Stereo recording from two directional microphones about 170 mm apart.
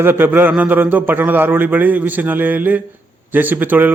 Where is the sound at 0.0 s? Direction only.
10° right (ahead or behind).